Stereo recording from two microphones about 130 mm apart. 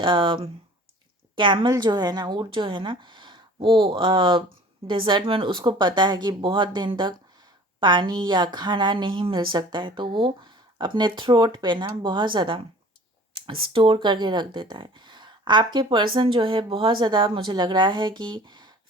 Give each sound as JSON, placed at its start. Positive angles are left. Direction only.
{"t": 0.0, "sound": "speech", "side_deg": -40}